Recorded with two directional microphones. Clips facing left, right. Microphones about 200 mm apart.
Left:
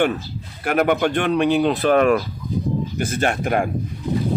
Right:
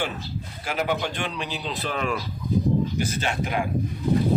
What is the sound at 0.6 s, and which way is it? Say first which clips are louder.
Speech: left 8 dB; 60° left (ahead or behind).